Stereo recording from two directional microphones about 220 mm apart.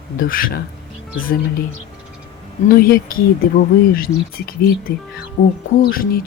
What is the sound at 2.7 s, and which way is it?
Speech, 40° left (ahead or behind).